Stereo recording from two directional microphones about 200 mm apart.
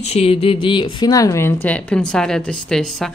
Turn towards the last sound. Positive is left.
turn(degrees=5)  # may be behind; listen again after turning